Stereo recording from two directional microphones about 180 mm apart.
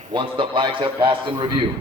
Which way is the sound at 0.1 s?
30° right (ahead or behind).